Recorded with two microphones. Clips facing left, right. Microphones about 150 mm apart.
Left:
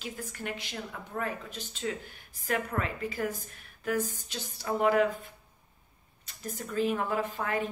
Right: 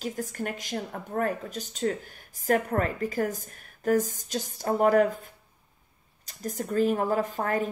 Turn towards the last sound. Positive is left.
turn(degrees=-40)  # may be behind; listen again after turning